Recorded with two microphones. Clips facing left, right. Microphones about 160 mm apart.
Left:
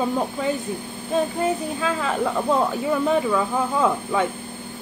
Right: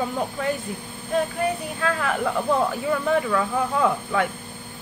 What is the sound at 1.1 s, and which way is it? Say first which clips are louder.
A woman's voice: left 2 dB; 20° left (ahead or behind).